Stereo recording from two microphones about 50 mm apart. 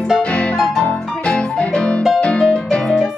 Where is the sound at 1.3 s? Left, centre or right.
Left.